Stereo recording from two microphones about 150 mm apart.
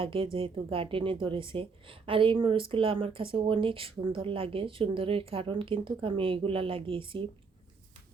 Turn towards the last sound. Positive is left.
turn(degrees=-35)  # may be behind; listen again after turning